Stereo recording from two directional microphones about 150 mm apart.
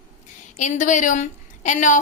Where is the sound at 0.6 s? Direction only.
55° left (ahead or behind).